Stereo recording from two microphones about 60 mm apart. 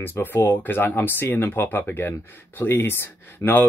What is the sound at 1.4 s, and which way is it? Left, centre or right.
Speech, left.